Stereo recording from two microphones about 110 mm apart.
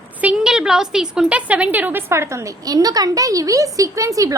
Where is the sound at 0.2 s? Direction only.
10° right (ahead or behind).